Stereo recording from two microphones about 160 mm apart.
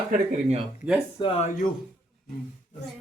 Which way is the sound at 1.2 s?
30° left (ahead or behind).